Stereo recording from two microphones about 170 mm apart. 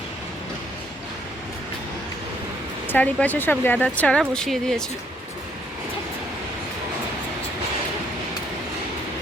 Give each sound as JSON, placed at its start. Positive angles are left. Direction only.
{"t": 2.8, "sound": "speech", "side_deg": 10}